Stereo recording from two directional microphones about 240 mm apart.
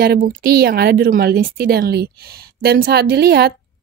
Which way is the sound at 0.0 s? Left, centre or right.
Right.